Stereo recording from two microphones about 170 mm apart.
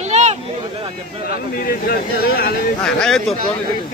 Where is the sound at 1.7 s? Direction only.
60° left (ahead or behind).